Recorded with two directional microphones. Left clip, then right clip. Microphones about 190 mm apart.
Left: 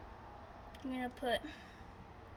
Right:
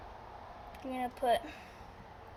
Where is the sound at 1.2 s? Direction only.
20° left (ahead or behind).